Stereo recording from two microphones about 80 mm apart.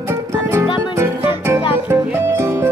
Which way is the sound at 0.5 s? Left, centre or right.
Right.